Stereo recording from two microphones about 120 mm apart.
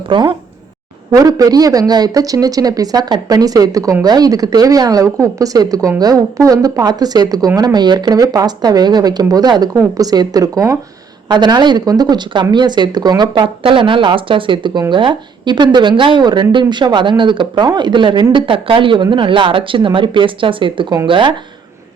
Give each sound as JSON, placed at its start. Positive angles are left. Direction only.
{"t": 0.1, "sound": "speech", "side_deg": -45}
{"t": 1.1, "sound": "speech", "side_deg": -30}